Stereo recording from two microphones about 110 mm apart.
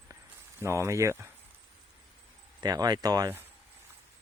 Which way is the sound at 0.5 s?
25° right (ahead or behind).